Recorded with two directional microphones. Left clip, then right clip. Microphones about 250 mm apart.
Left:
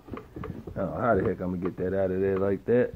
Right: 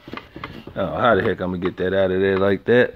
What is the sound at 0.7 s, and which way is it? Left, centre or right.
Speech, right.